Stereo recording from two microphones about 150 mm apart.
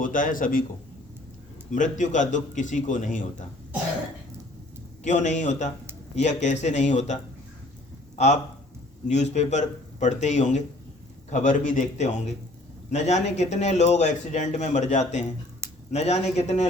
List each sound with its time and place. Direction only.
0.0 s a man's voice: 65° left (ahead or behind)
1.7 s a man's voice: 55° left (ahead or behind)
5.0 s speech: 55° left (ahead or behind)
9.0 s speech: 50° left (ahead or behind)